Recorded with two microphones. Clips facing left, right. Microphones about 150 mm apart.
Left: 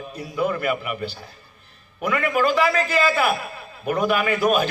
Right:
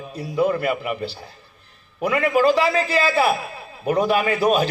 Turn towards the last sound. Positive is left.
turn(degrees=-30)  # may be behind; listen again after turning